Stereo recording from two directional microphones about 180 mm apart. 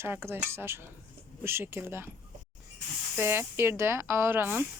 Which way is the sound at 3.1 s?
10° right (ahead or behind).